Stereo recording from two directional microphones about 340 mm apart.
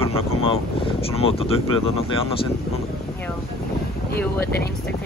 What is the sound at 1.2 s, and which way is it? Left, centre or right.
Speech, centre.